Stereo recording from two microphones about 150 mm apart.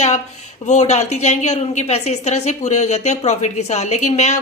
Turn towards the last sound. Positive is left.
turn(degrees=45)  # may be behind; listen again after turning